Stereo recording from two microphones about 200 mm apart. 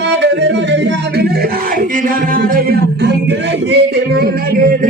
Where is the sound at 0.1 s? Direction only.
60° right (ahead or behind).